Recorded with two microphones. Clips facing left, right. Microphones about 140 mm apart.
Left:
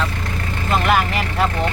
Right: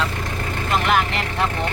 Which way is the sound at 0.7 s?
5° left (ahead or behind).